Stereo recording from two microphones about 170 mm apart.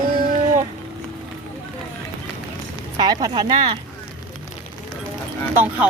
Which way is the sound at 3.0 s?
25° right (ahead or behind).